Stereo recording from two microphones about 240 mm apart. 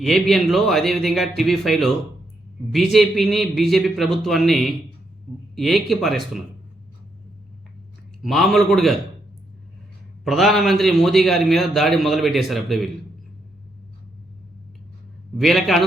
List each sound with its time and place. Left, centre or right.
0.0 s a man's voice: centre
8.2 s a man's voice: centre
10.2 s a man's voice: centre
15.4 s a man's voice: centre